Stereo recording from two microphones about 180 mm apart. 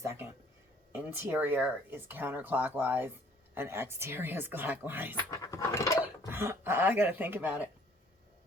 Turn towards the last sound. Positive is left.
turn(degrees=-10)  # may be behind; listen again after turning